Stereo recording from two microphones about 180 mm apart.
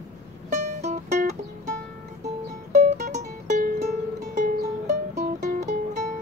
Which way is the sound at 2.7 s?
40° right (ahead or behind).